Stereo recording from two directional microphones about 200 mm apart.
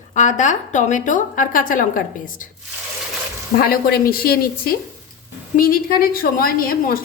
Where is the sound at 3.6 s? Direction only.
50° left (ahead or behind).